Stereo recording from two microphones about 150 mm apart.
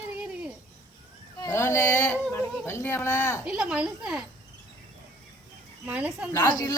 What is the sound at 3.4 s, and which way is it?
Speech, 5° right (ahead or behind).